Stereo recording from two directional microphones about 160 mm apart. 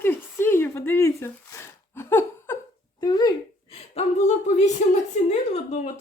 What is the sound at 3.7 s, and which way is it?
A woman's voice, 40° left (ahead or behind).